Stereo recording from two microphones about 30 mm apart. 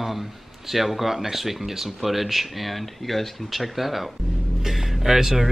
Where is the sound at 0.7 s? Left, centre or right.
Centre.